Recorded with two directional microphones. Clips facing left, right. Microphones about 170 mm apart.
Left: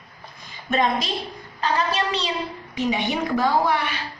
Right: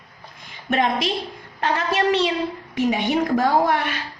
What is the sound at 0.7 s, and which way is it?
A woman's voice, 60° right (ahead or behind).